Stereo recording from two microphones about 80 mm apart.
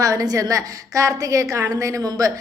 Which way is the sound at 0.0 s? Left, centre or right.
Right.